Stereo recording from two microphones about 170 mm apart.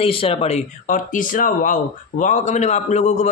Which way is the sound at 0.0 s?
35° left (ahead or behind).